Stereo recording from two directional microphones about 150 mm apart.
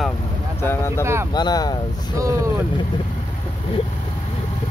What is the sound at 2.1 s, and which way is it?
Speech, 20° right (ahead or behind).